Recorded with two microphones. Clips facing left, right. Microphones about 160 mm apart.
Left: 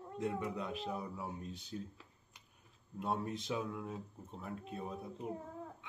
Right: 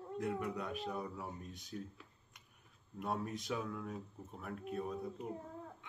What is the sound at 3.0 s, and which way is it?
Speech, 25° left (ahead or behind).